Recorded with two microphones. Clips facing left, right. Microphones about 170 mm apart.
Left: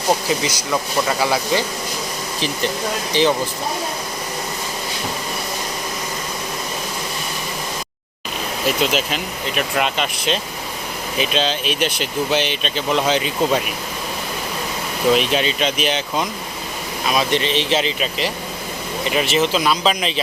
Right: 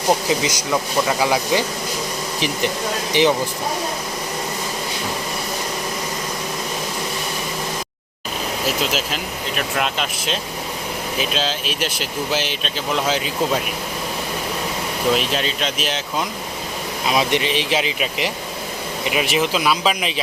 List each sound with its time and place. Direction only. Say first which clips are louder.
0.3 s speech: right 1 dB; 20° right (ahead or behind)
3.1 s speech: right 1 dB; 15° right (ahead or behind)
8.6 s speech: left 4 dB; 5° right (ahead or behind)
15.1 s speech: left 5 dB; centre (ahead or behind)
17.1 s speech: even; 20° right (ahead or behind)